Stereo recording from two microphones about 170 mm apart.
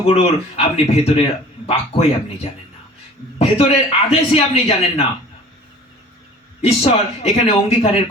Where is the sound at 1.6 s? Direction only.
35° left (ahead or behind).